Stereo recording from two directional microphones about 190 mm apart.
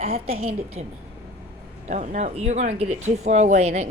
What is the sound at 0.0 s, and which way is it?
Speech, 35° right (ahead or behind).